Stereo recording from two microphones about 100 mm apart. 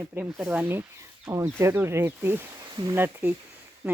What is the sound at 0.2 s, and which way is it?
Speech, 15° right (ahead or behind).